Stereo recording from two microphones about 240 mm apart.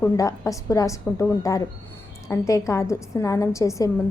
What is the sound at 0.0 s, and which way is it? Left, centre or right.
A woman's voice, centre.